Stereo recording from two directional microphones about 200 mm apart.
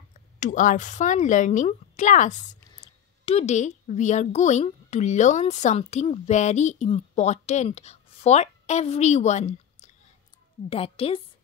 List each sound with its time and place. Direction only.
0.4 s a woman's voice: 40° left (ahead or behind)